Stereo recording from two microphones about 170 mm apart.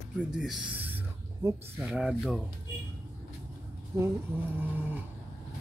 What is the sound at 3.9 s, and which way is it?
Speech, 15° right (ahead or behind).